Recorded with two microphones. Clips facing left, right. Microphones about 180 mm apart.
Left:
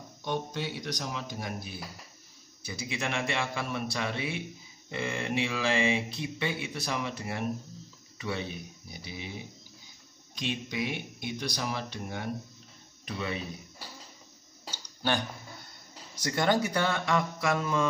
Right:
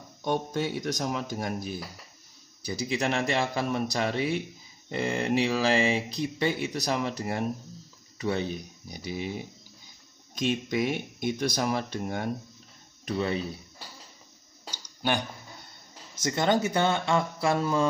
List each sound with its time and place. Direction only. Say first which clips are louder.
0.2 s speech: right 5 dB; 50° right (ahead or behind)
10.3 s speech: right 6 dB; 45° right (ahead or behind)
14.7 s a sound: right 2 dB; 15° right (ahead or behind)
16.2 s speech: right 2 dB; 25° right (ahead or behind)